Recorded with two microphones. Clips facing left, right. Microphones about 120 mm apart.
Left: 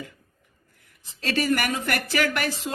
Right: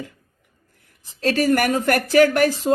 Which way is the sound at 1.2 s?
45° right (ahead or behind).